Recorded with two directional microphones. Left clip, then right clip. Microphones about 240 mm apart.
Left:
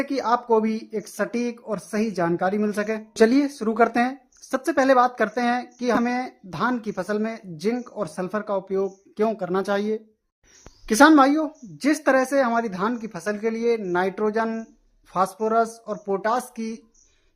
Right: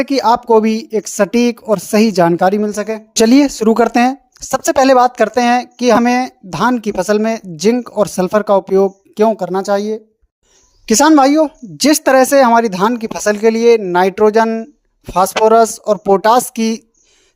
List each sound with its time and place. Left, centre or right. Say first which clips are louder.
0.0 s speech: right 10 dB; right
2.6 s speech: right 7 dB; centre
3.2 s speech: right 9 dB; right
10.8 s speech: right 6 dB; right